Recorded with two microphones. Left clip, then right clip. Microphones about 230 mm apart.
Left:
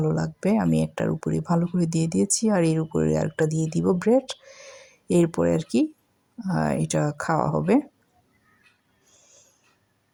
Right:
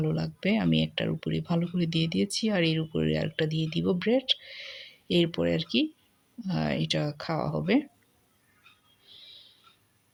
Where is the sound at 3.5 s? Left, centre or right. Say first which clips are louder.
Left 4 dB; centre.